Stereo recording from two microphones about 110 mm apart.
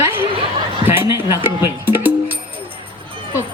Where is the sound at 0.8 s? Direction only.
20° right (ahead or behind).